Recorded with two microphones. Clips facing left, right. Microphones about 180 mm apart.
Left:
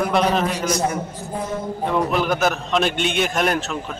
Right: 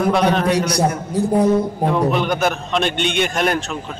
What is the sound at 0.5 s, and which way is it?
Speech, 70° right (ahead or behind).